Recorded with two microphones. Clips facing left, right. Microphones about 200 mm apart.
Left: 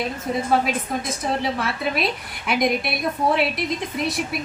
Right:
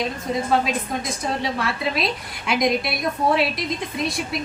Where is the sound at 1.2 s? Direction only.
Centre (ahead or behind).